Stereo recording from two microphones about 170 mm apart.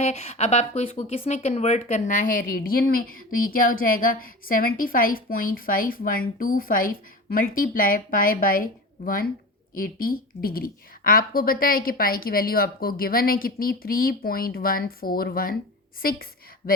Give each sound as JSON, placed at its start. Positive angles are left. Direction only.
{"t": 0.0, "sound": "speech", "side_deg": 40}